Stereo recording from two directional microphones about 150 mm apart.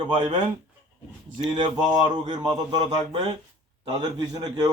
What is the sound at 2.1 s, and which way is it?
A man's voice, 30° right (ahead or behind).